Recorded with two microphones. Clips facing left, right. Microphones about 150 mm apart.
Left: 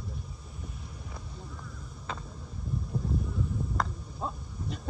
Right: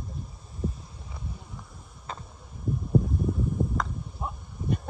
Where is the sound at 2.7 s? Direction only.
55° right (ahead or behind).